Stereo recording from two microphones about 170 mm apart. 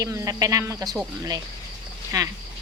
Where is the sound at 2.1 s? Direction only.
20° right (ahead or behind).